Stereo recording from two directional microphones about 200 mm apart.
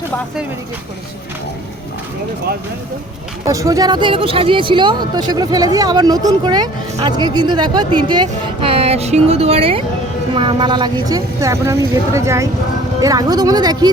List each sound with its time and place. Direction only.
3.4 s a woman's voice: 15° right (ahead or behind)